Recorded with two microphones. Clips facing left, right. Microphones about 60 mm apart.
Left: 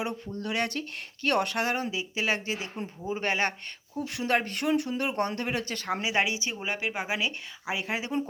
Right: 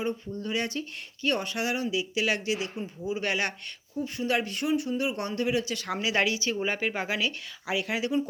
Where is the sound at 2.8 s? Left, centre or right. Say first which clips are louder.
Right 1 dB; left.